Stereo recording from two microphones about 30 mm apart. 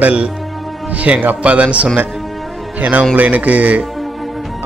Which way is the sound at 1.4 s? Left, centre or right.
Right.